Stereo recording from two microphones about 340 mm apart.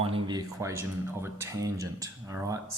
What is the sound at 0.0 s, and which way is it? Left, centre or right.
Speech, centre.